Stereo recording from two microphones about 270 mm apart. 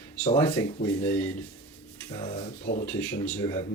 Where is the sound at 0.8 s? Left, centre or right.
Centre.